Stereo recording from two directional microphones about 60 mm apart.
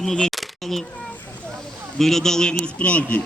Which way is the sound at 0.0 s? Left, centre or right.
Centre.